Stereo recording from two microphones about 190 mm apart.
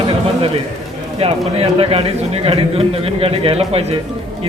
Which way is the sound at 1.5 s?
30° right (ahead or behind).